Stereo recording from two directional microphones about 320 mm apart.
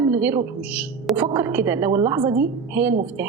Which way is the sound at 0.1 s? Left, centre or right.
Centre.